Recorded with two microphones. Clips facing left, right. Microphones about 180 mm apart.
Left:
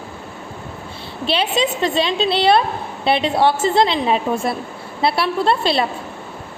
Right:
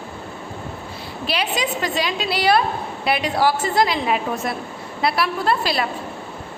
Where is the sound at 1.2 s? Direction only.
25° left (ahead or behind).